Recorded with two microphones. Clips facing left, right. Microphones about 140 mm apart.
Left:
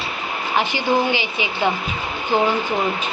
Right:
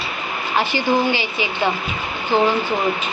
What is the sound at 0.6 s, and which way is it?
Speech, 15° left (ahead or behind).